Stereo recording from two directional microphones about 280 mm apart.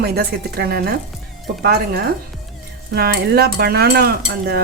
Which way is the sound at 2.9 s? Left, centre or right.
Right.